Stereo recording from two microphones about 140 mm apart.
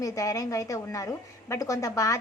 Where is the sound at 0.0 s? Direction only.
25° left (ahead or behind).